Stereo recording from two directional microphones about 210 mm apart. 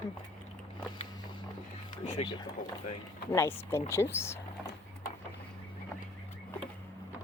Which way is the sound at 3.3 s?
10° left (ahead or behind).